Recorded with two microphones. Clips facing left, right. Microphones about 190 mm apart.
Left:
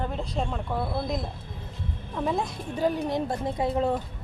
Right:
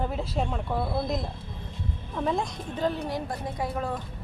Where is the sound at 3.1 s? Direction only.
25° left (ahead or behind).